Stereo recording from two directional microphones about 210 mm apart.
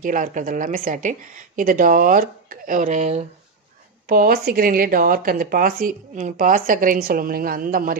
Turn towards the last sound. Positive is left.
turn(degrees=-40)  # may be behind; listen again after turning